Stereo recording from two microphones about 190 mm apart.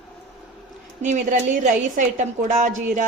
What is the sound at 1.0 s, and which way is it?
A woman's voice, 40° right (ahead or behind).